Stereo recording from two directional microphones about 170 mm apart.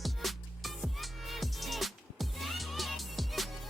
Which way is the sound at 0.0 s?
Centre (ahead or behind).